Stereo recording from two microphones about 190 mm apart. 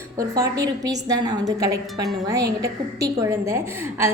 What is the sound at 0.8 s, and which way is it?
A woman's voice, 20° right (ahead or behind).